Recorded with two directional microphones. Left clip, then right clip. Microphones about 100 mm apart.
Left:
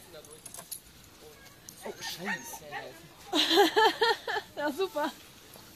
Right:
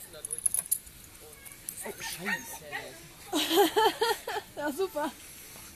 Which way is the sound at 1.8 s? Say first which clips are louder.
Even; 35° left (ahead or behind).